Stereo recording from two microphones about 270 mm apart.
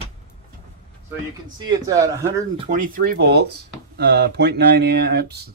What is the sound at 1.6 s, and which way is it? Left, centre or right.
Speech, centre.